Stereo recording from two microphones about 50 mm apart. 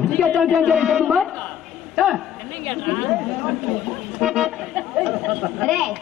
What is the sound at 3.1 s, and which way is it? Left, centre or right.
Speech, centre.